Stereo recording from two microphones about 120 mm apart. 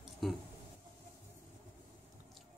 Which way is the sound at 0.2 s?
Centre (ahead or behind).